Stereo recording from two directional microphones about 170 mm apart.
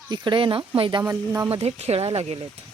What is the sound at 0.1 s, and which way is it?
Speech, 30° right (ahead or behind).